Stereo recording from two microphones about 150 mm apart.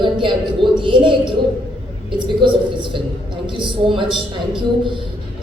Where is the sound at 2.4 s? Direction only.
35° right (ahead or behind).